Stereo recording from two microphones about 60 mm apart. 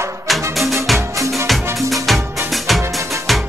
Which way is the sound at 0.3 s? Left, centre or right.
Centre.